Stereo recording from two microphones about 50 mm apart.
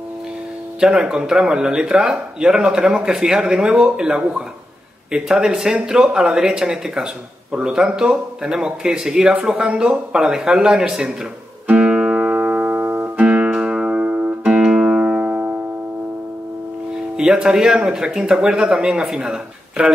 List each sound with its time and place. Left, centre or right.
0.7 s speech: centre
11.6 s music: centre; by 13.1 s right
13.2 s music: right
14.4 s music: centre
15.0 s music: right
17.2 s speech: centre